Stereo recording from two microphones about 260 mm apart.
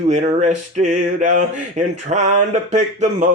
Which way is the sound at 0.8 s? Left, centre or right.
Right.